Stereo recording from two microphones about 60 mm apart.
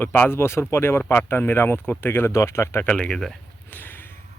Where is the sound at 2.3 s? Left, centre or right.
Left.